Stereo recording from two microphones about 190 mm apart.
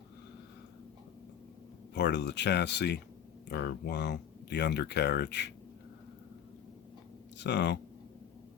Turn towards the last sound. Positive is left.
turn(degrees=65)  # may be behind; listen again after turning